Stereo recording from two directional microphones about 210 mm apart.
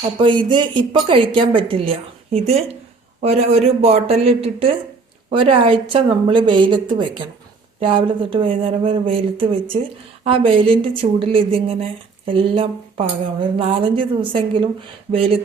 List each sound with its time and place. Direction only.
0.2 s a woman's voice: 25° right (ahead or behind)